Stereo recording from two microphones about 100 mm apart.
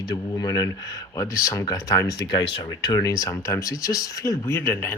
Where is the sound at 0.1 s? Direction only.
40° left (ahead or behind).